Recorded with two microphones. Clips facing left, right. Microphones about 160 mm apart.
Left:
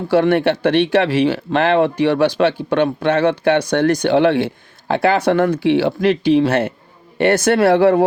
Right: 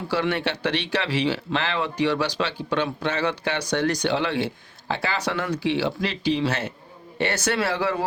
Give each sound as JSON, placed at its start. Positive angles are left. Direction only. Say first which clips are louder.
{"t": 0.1, "sound": "speech", "louder": "left 11 dB", "side_deg": 55}